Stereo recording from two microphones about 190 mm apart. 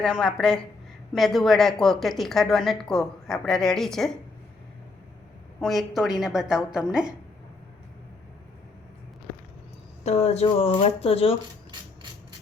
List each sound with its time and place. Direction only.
0.0 s a woman's voice: centre (ahead or behind)
5.5 s a woman's voice: centre (ahead or behind)
10.0 s speech: 35° left (ahead or behind)